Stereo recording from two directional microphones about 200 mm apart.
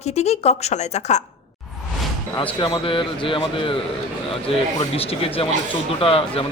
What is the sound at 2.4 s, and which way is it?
Speech, 25° left (ahead or behind).